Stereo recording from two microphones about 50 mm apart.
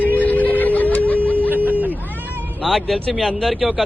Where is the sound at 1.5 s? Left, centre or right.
Right.